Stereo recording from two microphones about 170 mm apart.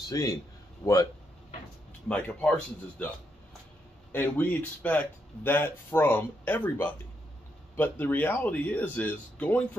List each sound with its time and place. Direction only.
0.1 s a man's voice: 20° left (ahead or behind)
0.8 s speech: 5° left (ahead or behind)
2.0 s speech: 5° left (ahead or behind)
4.1 s speech: 10° left (ahead or behind)